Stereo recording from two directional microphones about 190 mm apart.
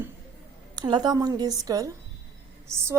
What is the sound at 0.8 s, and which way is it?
A woman's voice, 20° right (ahead or behind).